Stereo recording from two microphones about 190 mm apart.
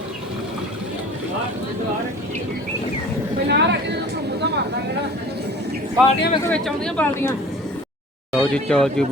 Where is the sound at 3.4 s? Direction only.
65° right (ahead or behind).